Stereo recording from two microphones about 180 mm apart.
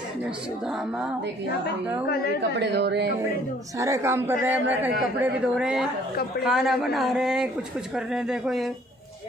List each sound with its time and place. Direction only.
2.6 s a woman's voice: 70° right (ahead or behind)
3.7 s a man's voice: 15° right (ahead or behind); by 8.7 s centre (ahead or behind)